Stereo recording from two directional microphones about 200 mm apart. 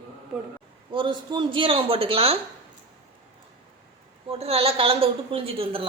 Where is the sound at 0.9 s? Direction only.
25° right (ahead or behind).